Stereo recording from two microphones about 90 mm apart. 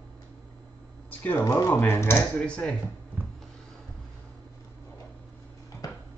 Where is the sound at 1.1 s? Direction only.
20° left (ahead or behind).